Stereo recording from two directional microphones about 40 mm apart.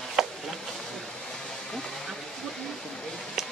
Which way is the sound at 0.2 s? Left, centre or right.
Centre.